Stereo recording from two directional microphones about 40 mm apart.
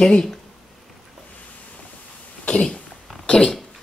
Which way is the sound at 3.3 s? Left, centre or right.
Centre.